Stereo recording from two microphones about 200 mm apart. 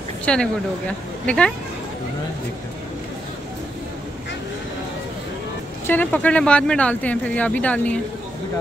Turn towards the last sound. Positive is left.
turn(degrees=5)  # may be behind; listen again after turning